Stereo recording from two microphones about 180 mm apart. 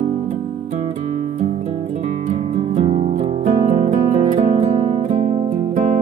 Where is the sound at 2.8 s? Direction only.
35° right (ahead or behind).